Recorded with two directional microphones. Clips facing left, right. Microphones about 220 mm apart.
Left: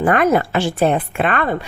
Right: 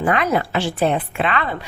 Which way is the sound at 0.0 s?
50° left (ahead or behind).